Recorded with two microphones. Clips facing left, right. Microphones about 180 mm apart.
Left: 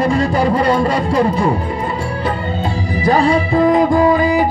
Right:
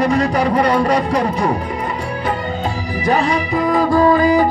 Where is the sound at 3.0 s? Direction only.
30° left (ahead or behind).